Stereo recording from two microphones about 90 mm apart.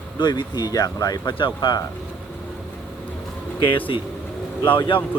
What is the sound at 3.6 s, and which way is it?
Speech, 70° left (ahead or behind).